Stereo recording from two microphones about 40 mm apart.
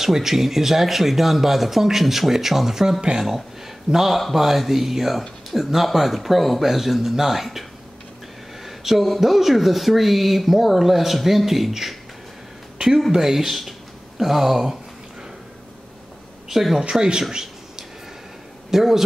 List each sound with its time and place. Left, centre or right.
0.0 s speech: centre
3.0 s speech: right
3.3 s speech: centre
8.6 s speech: centre
13.1 s speech: centre
16.4 s a woman's voice: centre
16.9 s speech: right
17.2 s a sound: centre
18.7 s a man's voice: centre